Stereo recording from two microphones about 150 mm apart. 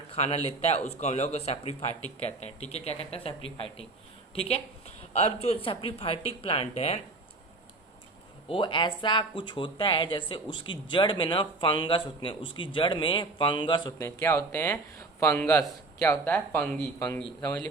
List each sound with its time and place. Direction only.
0.1 s a man's voice: 40° left (ahead or behind)
8.4 s speech: 35° left (ahead or behind)
14.2 s speech: 15° left (ahead or behind)